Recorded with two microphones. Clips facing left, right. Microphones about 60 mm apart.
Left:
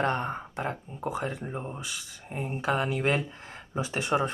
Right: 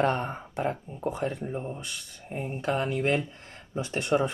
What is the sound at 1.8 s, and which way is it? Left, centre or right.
Speech, left.